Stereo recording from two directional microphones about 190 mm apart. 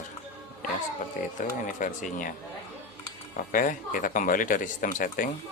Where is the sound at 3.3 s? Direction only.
45° left (ahead or behind).